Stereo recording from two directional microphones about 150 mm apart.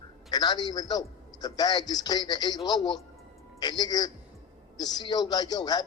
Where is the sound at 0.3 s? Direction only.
25° left (ahead or behind).